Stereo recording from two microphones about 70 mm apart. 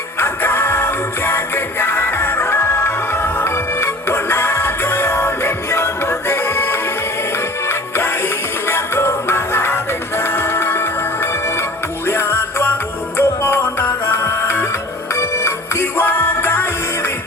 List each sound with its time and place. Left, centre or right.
0.2 s music: left
15.1 s music: left